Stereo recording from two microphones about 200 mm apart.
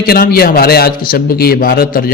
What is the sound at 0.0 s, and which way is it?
A man's voice, 50° left (ahead or behind).